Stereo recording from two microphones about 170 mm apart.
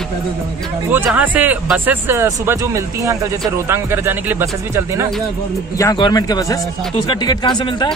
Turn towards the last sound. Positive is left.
turn(degrees=25)  # may be behind; listen again after turning